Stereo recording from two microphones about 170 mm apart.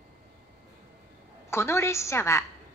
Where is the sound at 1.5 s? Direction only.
15° left (ahead or behind).